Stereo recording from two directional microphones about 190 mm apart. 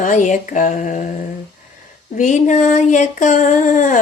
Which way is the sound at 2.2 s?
40° left (ahead or behind).